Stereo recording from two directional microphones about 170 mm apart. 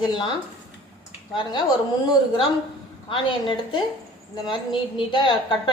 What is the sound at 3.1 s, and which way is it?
Speech, 30° left (ahead or behind).